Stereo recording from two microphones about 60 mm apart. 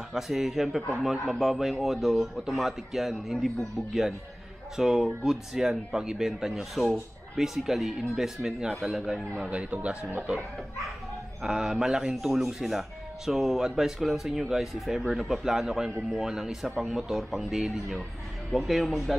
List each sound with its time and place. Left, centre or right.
0.1 s speech: centre
11.4 s speech: centre